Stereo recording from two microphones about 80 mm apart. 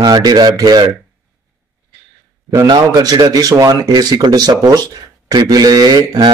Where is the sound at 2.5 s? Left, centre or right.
Right.